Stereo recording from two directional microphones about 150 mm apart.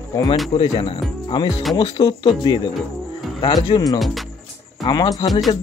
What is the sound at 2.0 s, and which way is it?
Speech, 30° left (ahead or behind).